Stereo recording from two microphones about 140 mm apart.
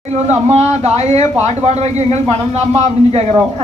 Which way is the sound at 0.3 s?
55° right (ahead or behind).